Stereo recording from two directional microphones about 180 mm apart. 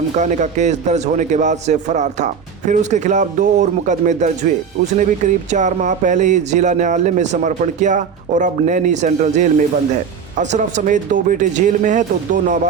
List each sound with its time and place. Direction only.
0.2 s a man's voice: 40° right (ahead or behind)